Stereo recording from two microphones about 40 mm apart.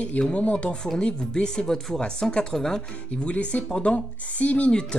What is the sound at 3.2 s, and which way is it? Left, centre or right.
Speech, left.